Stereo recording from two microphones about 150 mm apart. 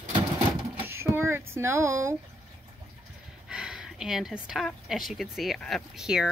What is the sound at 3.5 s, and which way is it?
A woman's voice, 5° right (ahead or behind).